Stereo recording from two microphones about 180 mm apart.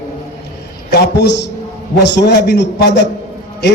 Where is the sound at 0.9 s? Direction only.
65° left (ahead or behind).